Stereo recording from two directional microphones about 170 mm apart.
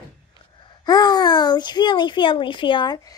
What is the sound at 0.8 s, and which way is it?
A child's voice, 25° left (ahead or behind).